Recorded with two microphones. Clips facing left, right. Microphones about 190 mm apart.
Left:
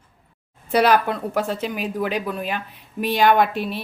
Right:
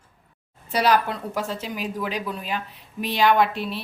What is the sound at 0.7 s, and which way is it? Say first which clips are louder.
A woman's voice: left 4 dB; 55° left (ahead or behind).